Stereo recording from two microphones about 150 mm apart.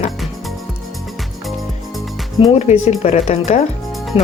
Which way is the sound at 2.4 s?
50° left (ahead or behind).